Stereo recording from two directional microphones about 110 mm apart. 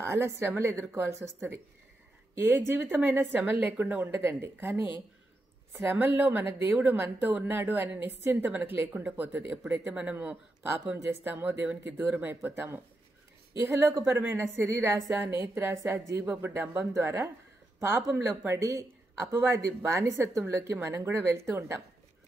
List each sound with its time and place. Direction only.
0.0 s a woman's voice: 25° right (ahead or behind)
14.0 s a woman's voice: 20° right (ahead or behind)